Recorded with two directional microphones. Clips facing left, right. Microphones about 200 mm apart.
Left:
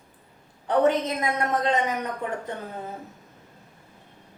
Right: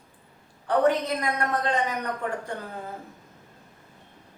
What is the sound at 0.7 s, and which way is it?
Speech, 20° left (ahead or behind).